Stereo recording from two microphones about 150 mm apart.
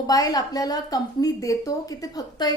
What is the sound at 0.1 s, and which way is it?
A woman's voice, 25° left (ahead or behind).